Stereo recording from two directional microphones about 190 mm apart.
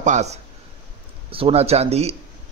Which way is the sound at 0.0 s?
40° right (ahead or behind).